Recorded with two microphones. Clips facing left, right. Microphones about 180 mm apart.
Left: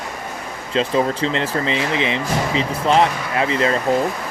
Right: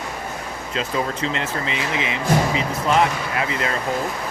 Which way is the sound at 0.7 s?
30° left (ahead or behind).